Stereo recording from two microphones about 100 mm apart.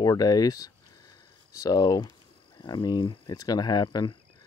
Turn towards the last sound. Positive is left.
turn(degrees=45)  # may be behind; listen again after turning